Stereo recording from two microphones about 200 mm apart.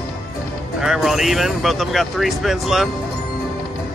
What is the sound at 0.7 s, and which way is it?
Speech, centre (ahead or behind).